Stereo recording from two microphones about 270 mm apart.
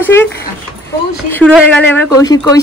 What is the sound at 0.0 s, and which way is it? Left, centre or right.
Dog, centre.